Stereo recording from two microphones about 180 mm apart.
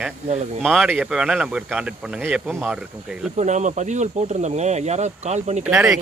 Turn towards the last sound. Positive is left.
turn(degrees=-10)  # may be behind; listen again after turning